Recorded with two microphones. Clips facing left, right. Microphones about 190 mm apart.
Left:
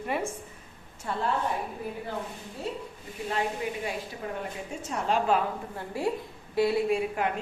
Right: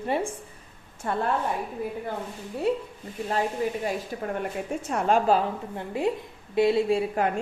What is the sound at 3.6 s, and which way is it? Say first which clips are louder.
Speech: right 5 dB; 40° right (ahead or behind).